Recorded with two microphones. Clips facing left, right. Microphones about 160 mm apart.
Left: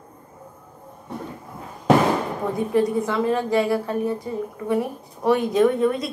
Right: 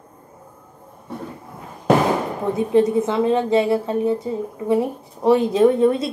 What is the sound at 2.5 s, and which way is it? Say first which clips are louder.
A woman's voice: right 4 dB; 25° right (ahead or behind).